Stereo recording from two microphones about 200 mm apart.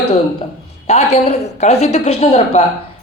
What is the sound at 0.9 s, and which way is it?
A man's voice, 35° left (ahead or behind).